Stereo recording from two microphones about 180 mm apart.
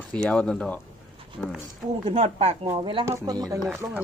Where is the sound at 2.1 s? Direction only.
35° right (ahead or behind).